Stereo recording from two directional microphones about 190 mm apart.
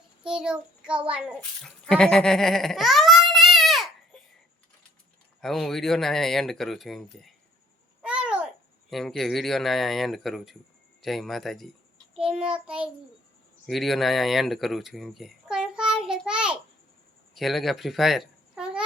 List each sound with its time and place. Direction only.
0.2 s speech: 5° right (ahead or behind)
1.4 s speech: 5° left (ahead or behind)
3.3 s baby cry: centre (ahead or behind)
5.4 s speech: centre (ahead or behind)
8.0 s babbling: 5° right (ahead or behind)
8.9 s speech: centre (ahead or behind)